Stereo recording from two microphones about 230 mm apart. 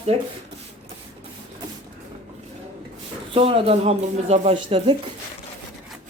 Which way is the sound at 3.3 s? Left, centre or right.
Right.